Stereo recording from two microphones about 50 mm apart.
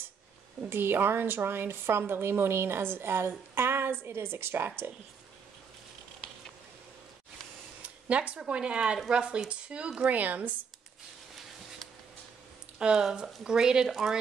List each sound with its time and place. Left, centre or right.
0.7 s a woman's voice: right
7.8 s speech: right
12.7 s speech: centre